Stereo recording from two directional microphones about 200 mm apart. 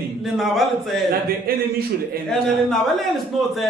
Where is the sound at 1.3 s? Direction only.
45° right (ahead or behind).